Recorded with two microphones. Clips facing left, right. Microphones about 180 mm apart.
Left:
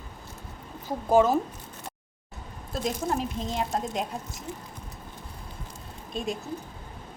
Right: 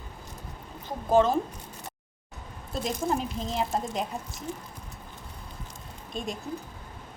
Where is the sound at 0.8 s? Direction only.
10° left (ahead or behind).